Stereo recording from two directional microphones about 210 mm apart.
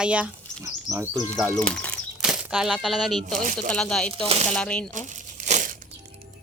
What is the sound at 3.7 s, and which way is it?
Speech, 5° left (ahead or behind).